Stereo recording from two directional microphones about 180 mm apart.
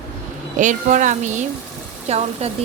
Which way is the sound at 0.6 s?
45° right (ahead or behind).